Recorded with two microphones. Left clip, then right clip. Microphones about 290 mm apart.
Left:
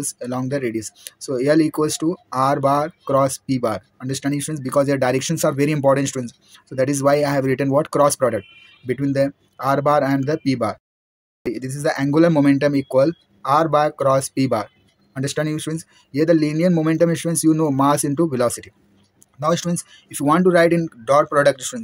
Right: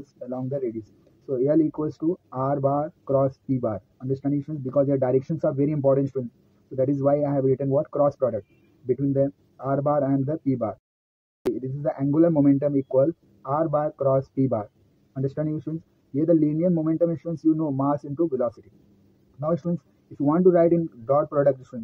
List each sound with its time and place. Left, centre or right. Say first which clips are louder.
0.2 s speech: left 5 dB; left
11.8 s speech: left 5 dB; left
19.6 s speech: left 4 dB; left